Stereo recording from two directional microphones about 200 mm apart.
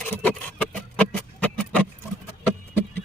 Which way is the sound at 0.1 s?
10° left (ahead or behind).